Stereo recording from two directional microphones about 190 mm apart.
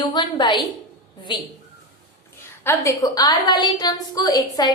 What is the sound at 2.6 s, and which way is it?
A woman's voice, 15° left (ahead or behind).